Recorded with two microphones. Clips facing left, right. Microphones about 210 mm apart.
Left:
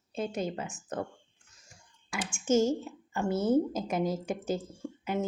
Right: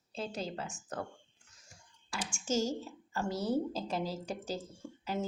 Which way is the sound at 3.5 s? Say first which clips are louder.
Left 6 dB; 20° left (ahead or behind).